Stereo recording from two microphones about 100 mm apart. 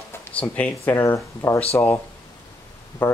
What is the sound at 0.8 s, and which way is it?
Speech, 30° left (ahead or behind).